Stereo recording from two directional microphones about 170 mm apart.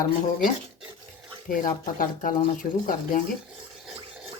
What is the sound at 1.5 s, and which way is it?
Speech, 50° left (ahead or behind).